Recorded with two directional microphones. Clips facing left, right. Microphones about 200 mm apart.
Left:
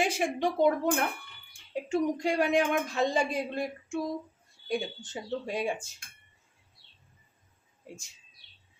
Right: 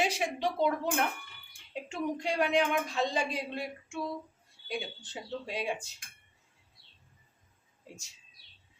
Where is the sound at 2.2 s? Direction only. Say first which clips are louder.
Left 2 dB; 45° left (ahead or behind).